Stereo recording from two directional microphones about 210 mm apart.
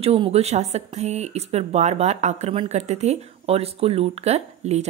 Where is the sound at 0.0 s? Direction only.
30° right (ahead or behind).